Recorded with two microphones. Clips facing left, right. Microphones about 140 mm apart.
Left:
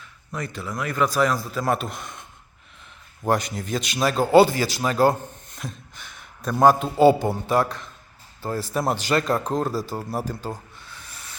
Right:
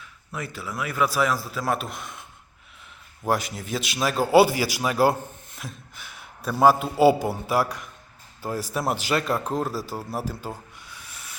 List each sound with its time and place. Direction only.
0.3 s a man's voice: 5° right (ahead or behind)
3.2 s a man's voice: 5° right (ahead or behind)
10.8 s a sound: 10° right (ahead or behind)